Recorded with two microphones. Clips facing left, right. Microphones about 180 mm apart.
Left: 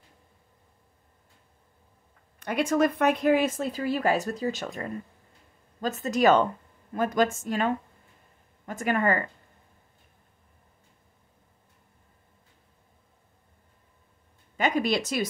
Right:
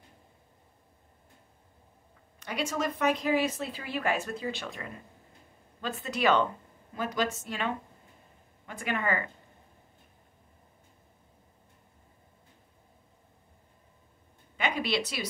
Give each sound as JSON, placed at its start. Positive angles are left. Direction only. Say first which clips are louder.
{"t": 2.4, "sound": "speech", "louder": "left 8 dB", "side_deg": 55}
{"t": 14.6, "sound": "speech", "louder": "left 5 dB", "side_deg": 45}